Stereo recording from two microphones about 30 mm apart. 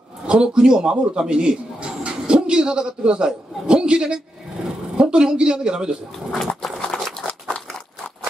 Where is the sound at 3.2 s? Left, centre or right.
Right.